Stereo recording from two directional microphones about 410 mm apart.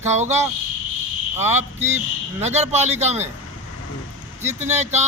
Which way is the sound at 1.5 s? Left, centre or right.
Centre.